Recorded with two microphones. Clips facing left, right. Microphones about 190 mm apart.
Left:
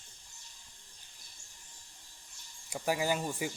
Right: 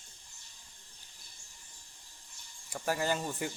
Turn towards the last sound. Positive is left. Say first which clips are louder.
# left 1 dB
turn(degrees=10)  # may be behind; listen again after turning